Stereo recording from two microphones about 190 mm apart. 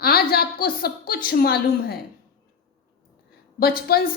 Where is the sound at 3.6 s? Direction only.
50° left (ahead or behind).